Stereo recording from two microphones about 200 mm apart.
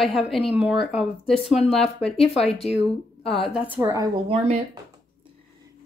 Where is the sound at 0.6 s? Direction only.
5° right (ahead or behind).